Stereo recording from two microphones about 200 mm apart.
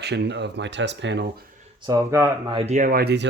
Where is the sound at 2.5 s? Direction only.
30° right (ahead or behind); by 3.3 s 55° right (ahead or behind).